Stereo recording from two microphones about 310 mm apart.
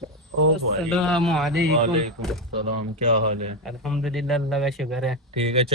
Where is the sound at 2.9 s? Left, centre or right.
Right.